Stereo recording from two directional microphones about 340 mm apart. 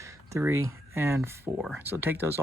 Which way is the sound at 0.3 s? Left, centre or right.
Centre.